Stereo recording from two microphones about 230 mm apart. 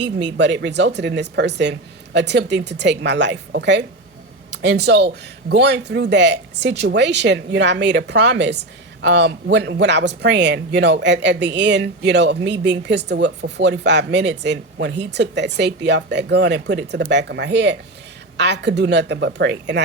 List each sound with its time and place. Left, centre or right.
0.0 s speech: right